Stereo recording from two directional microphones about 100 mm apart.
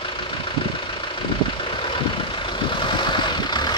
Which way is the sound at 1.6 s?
60° left (ahead or behind).